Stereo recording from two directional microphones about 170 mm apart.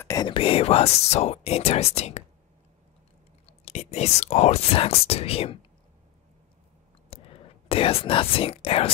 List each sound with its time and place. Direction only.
0.0 s a sound: 20° left (ahead or behind)
0.3 s speech: 35° left (ahead or behind)
3.4 s speech: 40° left (ahead or behind)
7.1 s speech: 35° left (ahead or behind)